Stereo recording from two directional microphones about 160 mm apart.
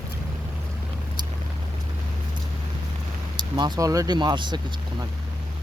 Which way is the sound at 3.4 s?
25° right (ahead or behind).